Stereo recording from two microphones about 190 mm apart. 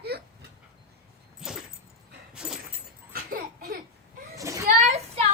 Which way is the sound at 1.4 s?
5° right (ahead or behind).